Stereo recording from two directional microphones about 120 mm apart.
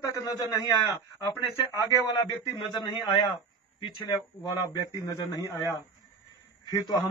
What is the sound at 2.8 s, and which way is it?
A man's voice, 35° left (ahead or behind).